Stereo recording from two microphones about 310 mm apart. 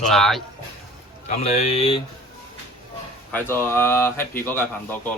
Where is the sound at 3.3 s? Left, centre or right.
Centre.